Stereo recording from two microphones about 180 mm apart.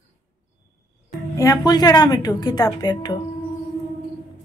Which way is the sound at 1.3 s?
20° left (ahead or behind).